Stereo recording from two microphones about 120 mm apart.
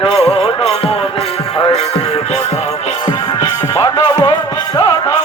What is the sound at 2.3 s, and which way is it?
Music, 65° left (ahead or behind).